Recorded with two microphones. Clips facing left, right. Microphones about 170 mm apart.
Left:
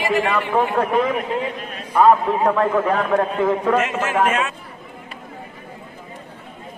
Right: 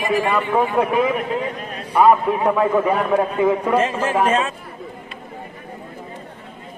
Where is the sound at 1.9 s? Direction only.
10° right (ahead or behind).